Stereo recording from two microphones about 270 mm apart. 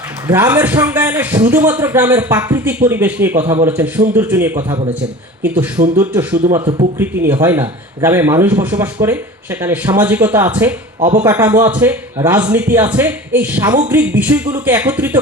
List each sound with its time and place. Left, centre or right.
0.3 s a man's voice: centre
6.4 s a man's voice: centre